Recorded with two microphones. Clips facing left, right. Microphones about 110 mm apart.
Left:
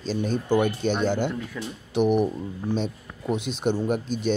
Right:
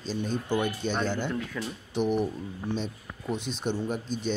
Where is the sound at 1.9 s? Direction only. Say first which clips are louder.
Left 6 dB; 70° left (ahead or behind).